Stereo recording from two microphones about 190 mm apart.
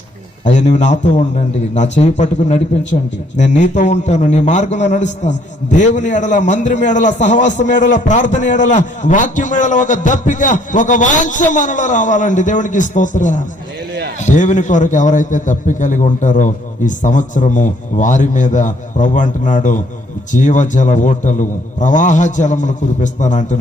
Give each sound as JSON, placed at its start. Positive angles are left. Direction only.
{"t": 0.4, "sound": "a man's voice", "side_deg": 40}